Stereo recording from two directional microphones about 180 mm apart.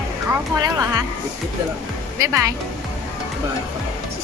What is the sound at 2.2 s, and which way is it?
Speech, 15° right (ahead or behind).